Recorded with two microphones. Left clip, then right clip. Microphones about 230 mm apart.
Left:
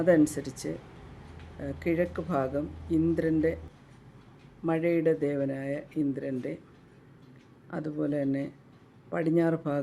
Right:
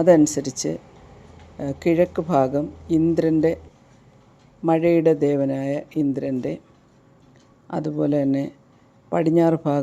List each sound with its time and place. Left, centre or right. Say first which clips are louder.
0.0 s speech: right 8 dB; right
4.6 s speech: right 9 dB; right
7.7 s speech: right 9 dB; right